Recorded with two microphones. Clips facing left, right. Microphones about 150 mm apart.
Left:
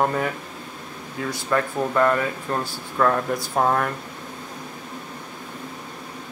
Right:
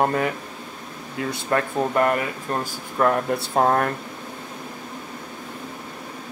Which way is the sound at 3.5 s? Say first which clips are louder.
Right 2 dB; 35° right (ahead or behind).